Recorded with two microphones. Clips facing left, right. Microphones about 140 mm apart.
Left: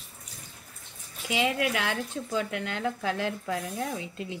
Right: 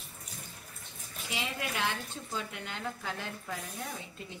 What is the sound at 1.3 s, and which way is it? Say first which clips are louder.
A woman's voice: left 10 dB; 90° left.